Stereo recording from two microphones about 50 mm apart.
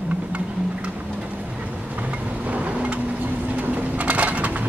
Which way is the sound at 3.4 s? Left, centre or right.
Right.